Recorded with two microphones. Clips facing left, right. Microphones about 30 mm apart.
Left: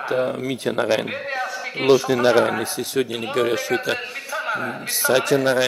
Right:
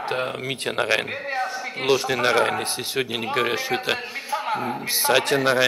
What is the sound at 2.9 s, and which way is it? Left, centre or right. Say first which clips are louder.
A man's voice: left 2 dB; right.